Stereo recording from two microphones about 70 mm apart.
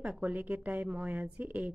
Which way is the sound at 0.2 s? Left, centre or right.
Right.